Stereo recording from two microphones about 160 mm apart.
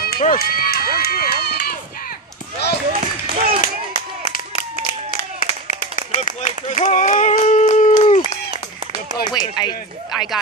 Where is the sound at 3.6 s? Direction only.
55° left (ahead or behind).